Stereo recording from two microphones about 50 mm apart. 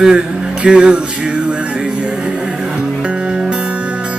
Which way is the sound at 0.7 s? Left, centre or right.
Centre.